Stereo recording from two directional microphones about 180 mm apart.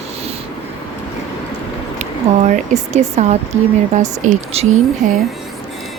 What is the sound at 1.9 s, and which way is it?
Speech, 40° right (ahead or behind).